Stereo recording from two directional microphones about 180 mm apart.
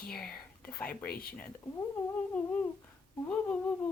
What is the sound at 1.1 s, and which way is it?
Speech, 55° left (ahead or behind).